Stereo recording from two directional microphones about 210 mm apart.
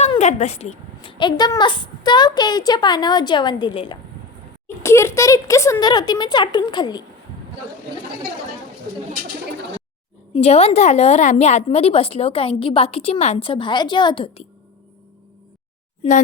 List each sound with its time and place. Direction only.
0.0 s a woman's voice: 30° left (ahead or behind)
10.3 s a woman's voice: 30° left (ahead or behind)